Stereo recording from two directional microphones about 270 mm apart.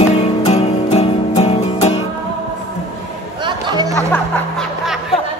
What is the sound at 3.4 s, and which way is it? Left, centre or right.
Chatter, centre.